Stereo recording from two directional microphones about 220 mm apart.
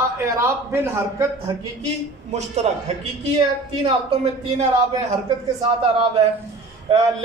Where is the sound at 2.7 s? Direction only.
30° right (ahead or behind).